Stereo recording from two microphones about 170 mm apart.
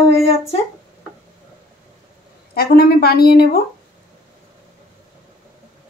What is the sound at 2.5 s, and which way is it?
Speech, 65° left (ahead or behind).